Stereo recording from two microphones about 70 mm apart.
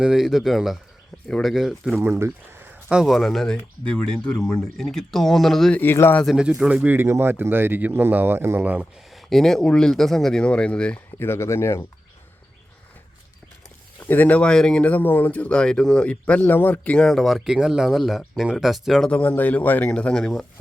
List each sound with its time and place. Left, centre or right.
0.0 s speech: centre
2.0 s speech: right
2.9 s speech: centre
3.4 s speech: centre
5.8 s speech: left
6.2 s speech: centre
6.8 s speech: right
8.8 s speech: centre
11.2 s speech: left
14.0 s speech: left
16.5 s speech: left
17.1 s speech: centre
19.0 s speech: centre
19.9 s speech: centre